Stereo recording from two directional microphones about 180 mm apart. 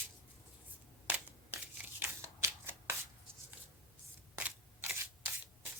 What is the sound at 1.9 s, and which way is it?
Shuffling cards, 15° right (ahead or behind).